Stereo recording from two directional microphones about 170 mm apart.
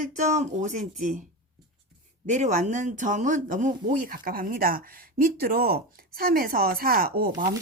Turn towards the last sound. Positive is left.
turn(degrees=-60)  # may be behind; listen again after turning